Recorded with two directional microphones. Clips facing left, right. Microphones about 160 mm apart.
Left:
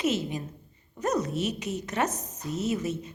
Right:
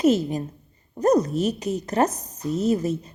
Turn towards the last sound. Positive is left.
turn(degrees=-35)  # may be behind; listen again after turning